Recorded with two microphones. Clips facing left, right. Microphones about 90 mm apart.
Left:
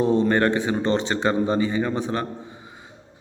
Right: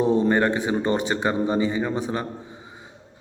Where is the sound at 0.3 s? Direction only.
10° right (ahead or behind).